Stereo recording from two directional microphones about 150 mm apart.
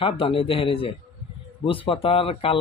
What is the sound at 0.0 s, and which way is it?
Speech, 35° left (ahead or behind).